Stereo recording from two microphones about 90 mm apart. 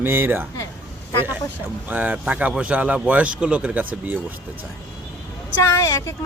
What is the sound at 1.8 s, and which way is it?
Speech, 20° right (ahead or behind).